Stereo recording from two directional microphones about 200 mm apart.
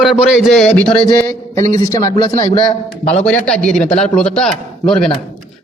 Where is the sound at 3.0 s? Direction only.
35° left (ahead or behind).